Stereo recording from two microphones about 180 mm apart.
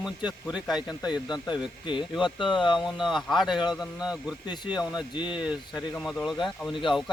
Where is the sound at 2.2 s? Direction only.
Centre (ahead or behind).